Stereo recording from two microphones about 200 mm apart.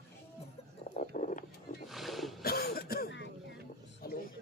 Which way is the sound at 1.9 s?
Centre (ahead or behind).